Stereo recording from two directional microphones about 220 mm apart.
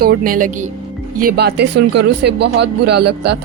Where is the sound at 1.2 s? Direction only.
45° right (ahead or behind).